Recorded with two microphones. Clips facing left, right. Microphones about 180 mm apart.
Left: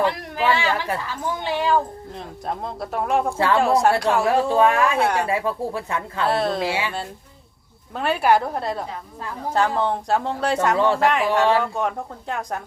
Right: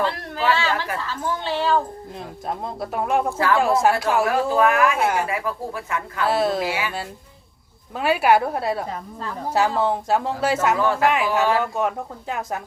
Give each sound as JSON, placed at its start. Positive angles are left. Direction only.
{"t": 0.0, "sound": "a sound", "side_deg": 15}
{"t": 1.0, "sound": "speech", "side_deg": 15}
{"t": 2.1, "sound": "speech", "side_deg": 0}
{"t": 4.3, "sound": "speech", "side_deg": 30}
{"t": 6.2, "sound": "speech", "side_deg": 0}
{"t": 6.6, "sound": "speech", "side_deg": 30}
{"t": 7.9, "sound": "speech", "side_deg": -5}
{"t": 10.8, "sound": "speech", "side_deg": 30}
{"t": 11.0, "sound": "speech", "side_deg": 0}